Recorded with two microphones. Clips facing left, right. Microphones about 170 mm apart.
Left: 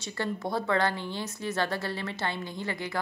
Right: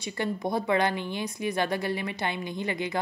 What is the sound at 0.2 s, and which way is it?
A woman's voice, 15° right (ahead or behind).